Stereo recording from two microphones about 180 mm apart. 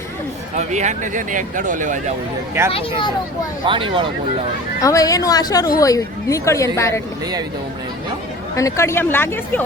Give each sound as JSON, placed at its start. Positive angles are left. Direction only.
{"t": 0.5, "sound": "speech", "side_deg": -40}
{"t": 3.7, "sound": "speech", "side_deg": -25}
{"t": 4.8, "sound": "a woman's voice", "side_deg": 20}
{"t": 8.5, "sound": "speech", "side_deg": 15}